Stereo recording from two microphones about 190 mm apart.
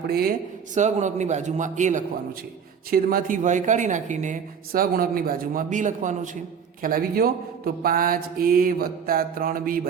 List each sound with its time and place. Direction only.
0.1 s speech: 50° right (ahead or behind)